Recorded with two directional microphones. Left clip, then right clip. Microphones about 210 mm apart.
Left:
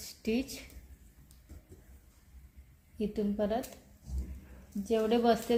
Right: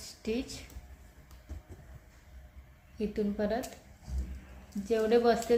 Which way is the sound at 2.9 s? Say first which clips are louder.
Right 1 dB; 20° left (ahead or behind).